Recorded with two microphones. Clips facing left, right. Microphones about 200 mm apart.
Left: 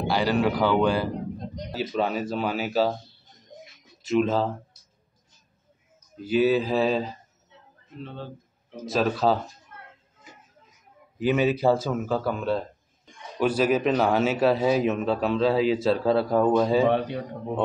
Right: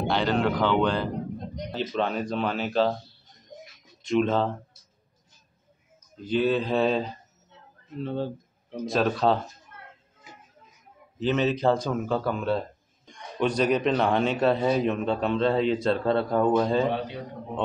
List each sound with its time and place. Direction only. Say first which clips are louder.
0.0 s speech: left 1 dB; 5° left (ahead or behind)
4.0 s a man's voice: left 1 dB; 5° left (ahead or behind)
6.2 s a man's voice: left 3 dB; 5° left (ahead or behind)
8.0 s speech: right 8 dB; 40° right (ahead or behind)
8.8 s a man's voice: even; centre (ahead or behind)
11.1 s a man's voice: left 2 dB; 10° left (ahead or behind)